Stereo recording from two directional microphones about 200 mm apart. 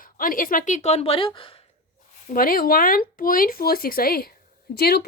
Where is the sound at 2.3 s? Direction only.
45° left (ahead or behind).